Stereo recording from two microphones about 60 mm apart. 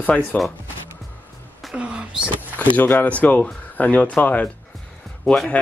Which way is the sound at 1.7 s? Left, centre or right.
Centre.